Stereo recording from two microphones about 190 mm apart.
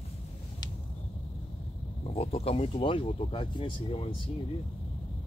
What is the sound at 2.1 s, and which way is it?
Speech, 30° left (ahead or behind).